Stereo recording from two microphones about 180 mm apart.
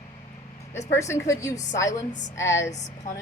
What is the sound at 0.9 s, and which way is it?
Speech, 15° left (ahead or behind).